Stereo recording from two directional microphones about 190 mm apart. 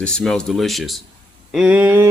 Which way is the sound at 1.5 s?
5° right (ahead or behind).